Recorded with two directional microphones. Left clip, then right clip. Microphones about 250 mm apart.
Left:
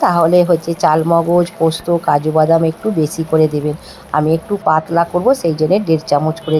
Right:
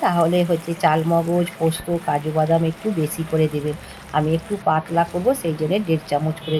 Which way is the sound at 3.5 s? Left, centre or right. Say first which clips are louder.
Left 6 dB; left.